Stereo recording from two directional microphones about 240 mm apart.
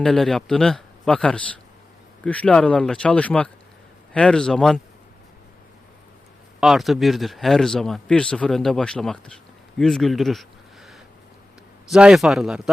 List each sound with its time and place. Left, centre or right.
0.0 s speech: centre
6.6 s speech: centre
11.9 s speech: centre